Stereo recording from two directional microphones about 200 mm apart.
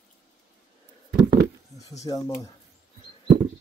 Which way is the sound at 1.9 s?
15° left (ahead or behind).